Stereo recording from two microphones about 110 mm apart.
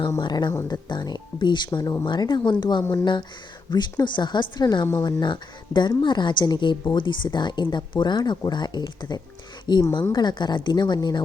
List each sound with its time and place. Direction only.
0.2 s a woman's voice: 45° left (ahead or behind)